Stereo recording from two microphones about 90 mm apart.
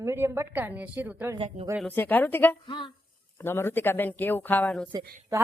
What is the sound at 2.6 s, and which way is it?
Speech, 65° left (ahead or behind).